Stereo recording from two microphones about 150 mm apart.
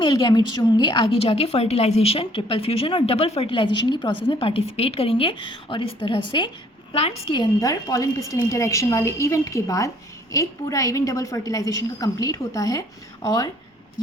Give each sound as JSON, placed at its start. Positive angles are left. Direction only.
{"t": 0.0, "sound": "a woman's voice", "side_deg": 25}
{"t": 7.3, "sound": "a woman's voice", "side_deg": 25}